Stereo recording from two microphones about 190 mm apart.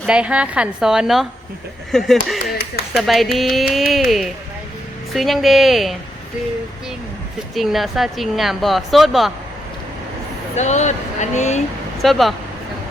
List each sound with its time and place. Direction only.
0.0 s a woman's voice: 5° right (ahead or behind)
7.5 s a woman's voice: centre (ahead or behind)
10.5 s speech: 35° left (ahead or behind)
12.0 s a woman's voice: centre (ahead or behind)